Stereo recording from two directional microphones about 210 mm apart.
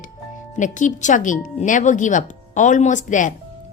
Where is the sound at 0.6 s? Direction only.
35° left (ahead or behind).